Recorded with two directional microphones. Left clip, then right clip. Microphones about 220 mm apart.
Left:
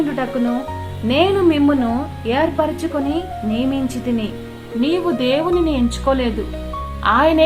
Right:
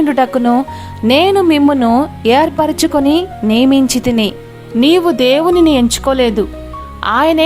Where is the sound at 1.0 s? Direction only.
50° right (ahead or behind).